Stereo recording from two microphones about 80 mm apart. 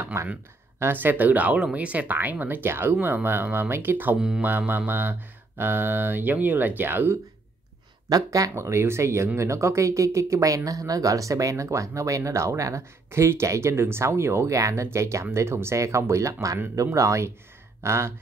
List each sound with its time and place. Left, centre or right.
0.0 s speech: right
8.1 s speech: right